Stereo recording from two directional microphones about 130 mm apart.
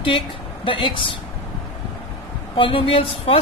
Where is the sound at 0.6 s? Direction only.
40° left (ahead or behind).